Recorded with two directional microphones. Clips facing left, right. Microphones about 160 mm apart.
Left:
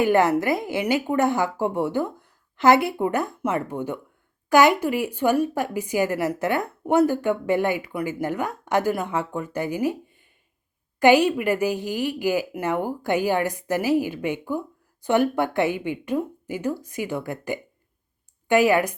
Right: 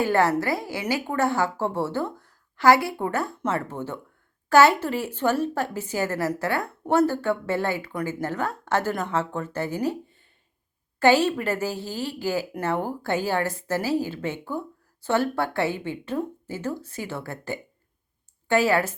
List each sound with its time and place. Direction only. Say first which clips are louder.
0.0 s a woman's voice: left 3 dB; 20° left (ahead or behind)